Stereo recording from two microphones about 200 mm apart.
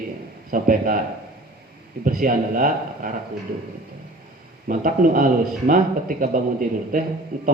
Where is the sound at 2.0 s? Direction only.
45° right (ahead or behind).